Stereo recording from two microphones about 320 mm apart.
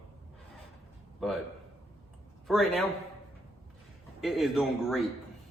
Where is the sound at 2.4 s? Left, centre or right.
Centre.